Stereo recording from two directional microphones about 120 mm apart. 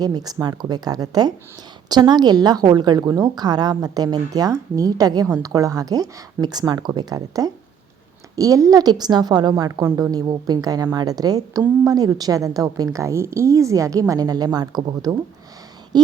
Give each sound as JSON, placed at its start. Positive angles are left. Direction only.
{"t": 0.0, "sound": "a woman's voice", "side_deg": -35}